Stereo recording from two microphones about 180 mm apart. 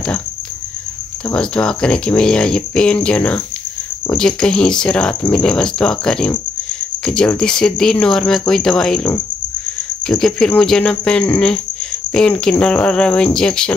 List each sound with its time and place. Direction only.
1.3 s speech: 5° left (ahead or behind)